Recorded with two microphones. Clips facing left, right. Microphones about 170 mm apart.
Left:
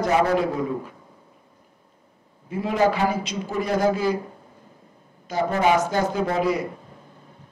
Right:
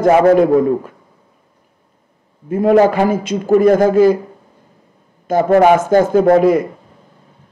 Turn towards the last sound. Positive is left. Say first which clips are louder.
# right 12 dB
turn(degrees=-50)  # may be behind; listen again after turning